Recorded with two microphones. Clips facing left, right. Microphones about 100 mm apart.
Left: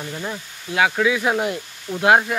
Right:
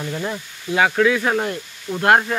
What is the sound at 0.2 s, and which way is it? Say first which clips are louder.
Speech: right 3 dB; 5° left (ahead or behind).